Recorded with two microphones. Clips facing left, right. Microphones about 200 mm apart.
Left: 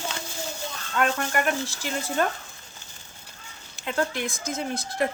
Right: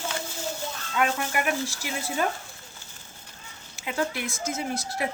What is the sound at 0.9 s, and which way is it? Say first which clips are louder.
Speech: left 1 dB; 10° right (ahead or behind).